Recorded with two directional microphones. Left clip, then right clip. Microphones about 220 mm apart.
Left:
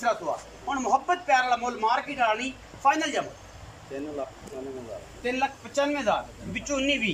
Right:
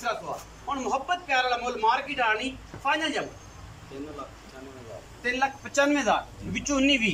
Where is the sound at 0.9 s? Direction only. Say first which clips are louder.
Left 5 dB; 30° left (ahead or behind).